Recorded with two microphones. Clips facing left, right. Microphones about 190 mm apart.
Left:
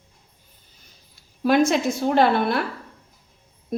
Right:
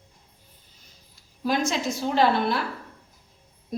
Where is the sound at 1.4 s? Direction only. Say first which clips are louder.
Left 7 dB; 60° left (ahead or behind).